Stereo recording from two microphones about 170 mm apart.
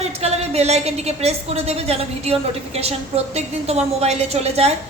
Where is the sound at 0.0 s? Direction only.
40° right (ahead or behind).